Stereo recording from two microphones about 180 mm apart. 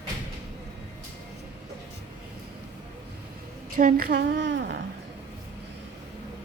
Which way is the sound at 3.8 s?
50° right (ahead or behind).